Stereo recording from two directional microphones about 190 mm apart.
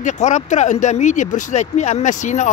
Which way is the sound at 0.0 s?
40° left (ahead or behind).